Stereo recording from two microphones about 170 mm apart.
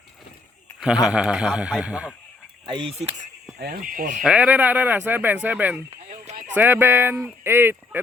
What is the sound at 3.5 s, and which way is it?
Speech, 65° right (ahead or behind).